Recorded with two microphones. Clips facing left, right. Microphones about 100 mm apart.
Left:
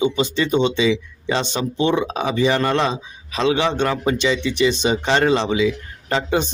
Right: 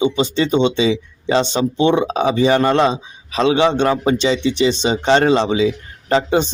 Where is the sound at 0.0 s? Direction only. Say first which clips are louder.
Right 3 dB; 25° right (ahead or behind).